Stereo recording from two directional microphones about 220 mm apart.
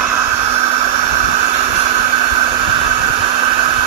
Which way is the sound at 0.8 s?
30° right (ahead or behind).